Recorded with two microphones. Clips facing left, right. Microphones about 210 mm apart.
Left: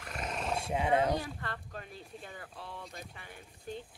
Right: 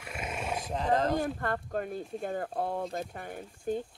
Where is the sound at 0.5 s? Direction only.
10° left (ahead or behind).